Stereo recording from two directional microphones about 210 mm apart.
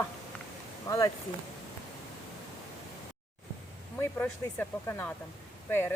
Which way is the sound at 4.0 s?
10° left (ahead or behind).